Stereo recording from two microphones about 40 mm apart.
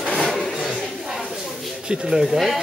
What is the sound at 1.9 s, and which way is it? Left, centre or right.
Speech, centre.